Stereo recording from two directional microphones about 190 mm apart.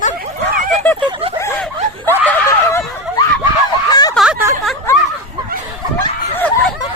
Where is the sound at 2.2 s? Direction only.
15° left (ahead or behind).